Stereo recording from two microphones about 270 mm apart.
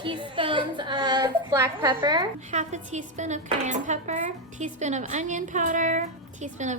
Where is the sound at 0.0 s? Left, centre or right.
Centre.